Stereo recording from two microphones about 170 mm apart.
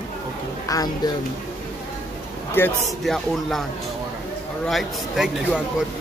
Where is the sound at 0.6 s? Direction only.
20° left (ahead or behind).